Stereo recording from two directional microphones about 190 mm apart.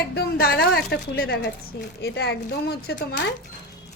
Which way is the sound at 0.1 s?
55° left (ahead or behind).